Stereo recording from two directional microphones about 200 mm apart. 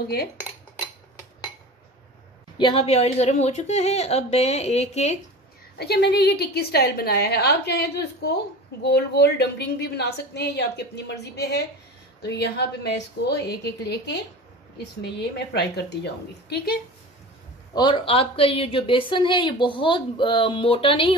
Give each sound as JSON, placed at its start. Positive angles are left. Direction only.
{"t": 0.0, "sound": "cutlery", "side_deg": 50}
{"t": 2.5, "sound": "a woman's voice", "side_deg": 25}
{"t": 5.8, "sound": "a woman's voice", "side_deg": 55}
{"t": 17.7, "sound": "speech", "side_deg": 25}